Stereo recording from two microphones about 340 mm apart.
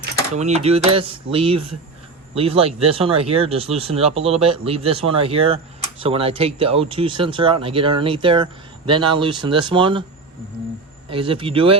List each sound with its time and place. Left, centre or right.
0.0 s speech: centre
11.1 s speech: centre